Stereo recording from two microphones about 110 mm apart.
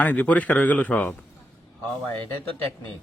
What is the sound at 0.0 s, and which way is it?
Speech, 15° left (ahead or behind).